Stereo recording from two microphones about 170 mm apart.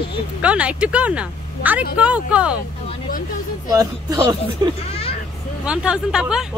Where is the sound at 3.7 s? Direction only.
20° right (ahead or behind).